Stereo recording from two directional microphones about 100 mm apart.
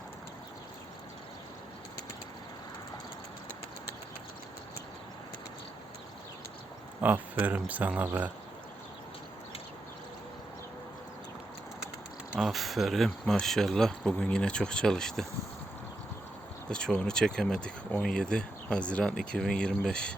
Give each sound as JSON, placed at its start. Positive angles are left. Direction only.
{"t": 7.0, "sound": "speech", "side_deg": -15}
{"t": 12.3, "sound": "speech", "side_deg": -5}
{"t": 16.6, "sound": "speech", "side_deg": 10}